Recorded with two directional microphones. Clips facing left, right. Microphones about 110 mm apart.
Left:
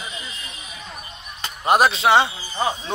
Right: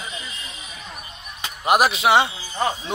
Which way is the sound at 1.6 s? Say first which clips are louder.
Left 1 dB; 30° left (ahead or behind).